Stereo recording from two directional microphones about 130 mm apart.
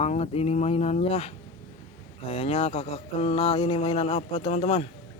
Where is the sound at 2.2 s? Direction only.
50° left (ahead or behind).